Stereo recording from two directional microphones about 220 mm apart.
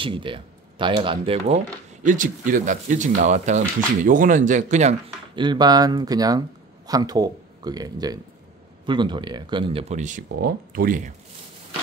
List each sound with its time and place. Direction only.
0.0 s speech: 20° right (ahead or behind); by 11.1 s 40° right (ahead or behind)